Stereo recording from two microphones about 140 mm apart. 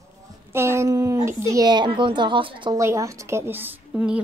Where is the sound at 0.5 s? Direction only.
15° right (ahead or behind); by 2.7 s 35° right (ahead or behind).